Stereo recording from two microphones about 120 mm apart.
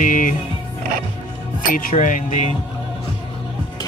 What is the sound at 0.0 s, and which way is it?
Music, 90° left.